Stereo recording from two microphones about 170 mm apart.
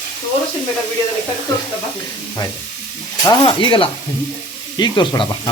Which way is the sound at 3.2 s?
25° left (ahead or behind).